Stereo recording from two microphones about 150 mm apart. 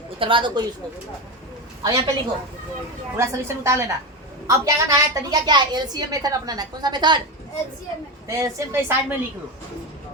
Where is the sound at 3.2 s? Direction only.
20° right (ahead or behind).